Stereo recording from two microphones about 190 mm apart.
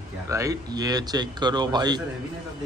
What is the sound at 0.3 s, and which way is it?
A man's voice, 15° right (ahead or behind).